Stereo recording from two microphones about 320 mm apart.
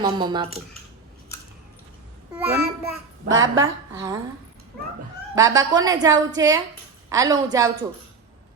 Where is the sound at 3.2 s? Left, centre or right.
Right.